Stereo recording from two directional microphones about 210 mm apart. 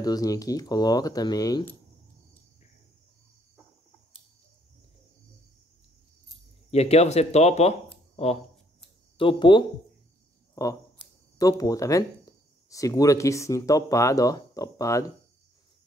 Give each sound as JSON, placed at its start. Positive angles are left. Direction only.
{"t": 0.0, "sound": "speech", "side_deg": 15}
{"t": 6.7, "sound": "speech", "side_deg": 30}
{"t": 9.2, "sound": "speech", "side_deg": 25}
{"t": 10.5, "sound": "a sound", "side_deg": 15}
{"t": 11.3, "sound": "speech", "side_deg": 15}